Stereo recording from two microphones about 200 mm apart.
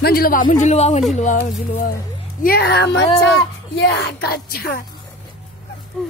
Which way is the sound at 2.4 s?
50° left (ahead or behind).